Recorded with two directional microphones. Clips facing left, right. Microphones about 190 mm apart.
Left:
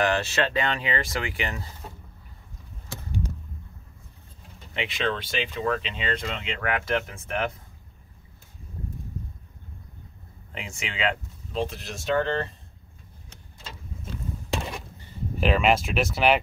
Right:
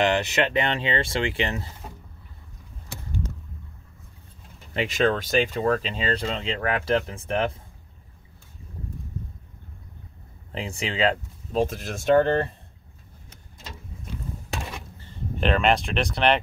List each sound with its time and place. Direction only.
0.0 s speech: 20° right (ahead or behind)
4.7 s speech: 45° right (ahead or behind)
10.5 s speech: 35° right (ahead or behind); by 12.5 s 55° right (ahead or behind)
15.0 s speech: 10° left (ahead or behind)